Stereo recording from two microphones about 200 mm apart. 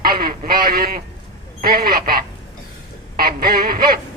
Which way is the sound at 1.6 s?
50° right (ahead or behind).